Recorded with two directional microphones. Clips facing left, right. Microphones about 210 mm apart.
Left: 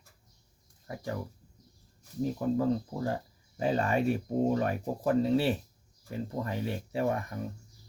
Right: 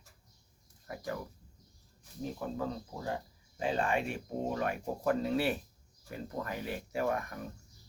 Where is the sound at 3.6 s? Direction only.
40° left (ahead or behind).